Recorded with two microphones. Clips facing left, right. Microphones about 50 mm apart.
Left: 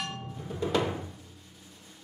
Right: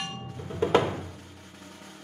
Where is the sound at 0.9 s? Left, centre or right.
Right.